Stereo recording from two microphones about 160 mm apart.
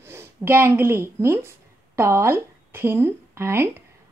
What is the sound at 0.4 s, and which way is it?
A woman's voice, 15° right (ahead or behind).